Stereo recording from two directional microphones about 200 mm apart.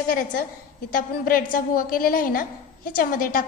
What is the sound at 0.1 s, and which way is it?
A woman's voice, 45° left (ahead or behind).